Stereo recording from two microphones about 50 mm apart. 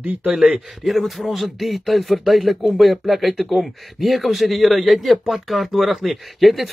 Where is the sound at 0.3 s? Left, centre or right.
Centre.